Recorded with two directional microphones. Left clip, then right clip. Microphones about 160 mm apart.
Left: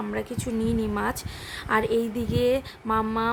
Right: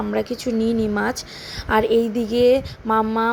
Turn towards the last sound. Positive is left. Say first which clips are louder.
# right 6 dB
turn(degrees=-15)  # may be behind; listen again after turning